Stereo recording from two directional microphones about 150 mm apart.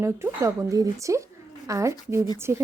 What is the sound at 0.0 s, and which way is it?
A woman's voice, 15° right (ahead or behind).